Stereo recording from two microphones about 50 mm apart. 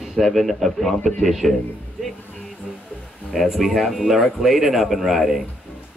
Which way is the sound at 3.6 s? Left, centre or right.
Centre.